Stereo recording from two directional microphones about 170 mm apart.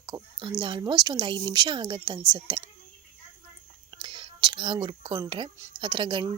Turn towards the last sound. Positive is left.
turn(degrees=-30)  # may be behind; listen again after turning